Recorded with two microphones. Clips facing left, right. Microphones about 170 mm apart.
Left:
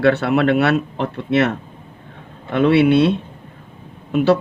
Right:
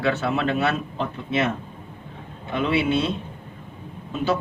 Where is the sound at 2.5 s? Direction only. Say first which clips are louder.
Left 9 dB; 65° left (ahead or behind).